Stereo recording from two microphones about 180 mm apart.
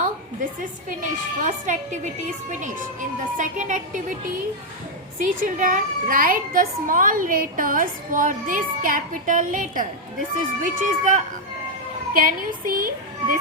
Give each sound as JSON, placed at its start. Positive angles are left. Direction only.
{"t": 0.6, "sound": "a child's voice", "side_deg": -45}
{"t": 5.2, "sound": "a child's voice", "side_deg": -45}